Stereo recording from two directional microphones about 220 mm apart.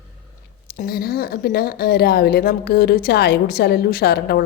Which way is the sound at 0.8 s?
45° left (ahead or behind).